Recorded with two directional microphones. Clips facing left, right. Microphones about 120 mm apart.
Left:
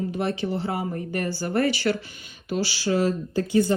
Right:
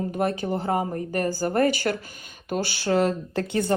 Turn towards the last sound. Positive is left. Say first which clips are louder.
# left 4 dB
turn(degrees=-60)  # may be behind; listen again after turning